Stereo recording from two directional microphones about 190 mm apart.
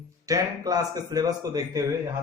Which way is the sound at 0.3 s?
20° right (ahead or behind).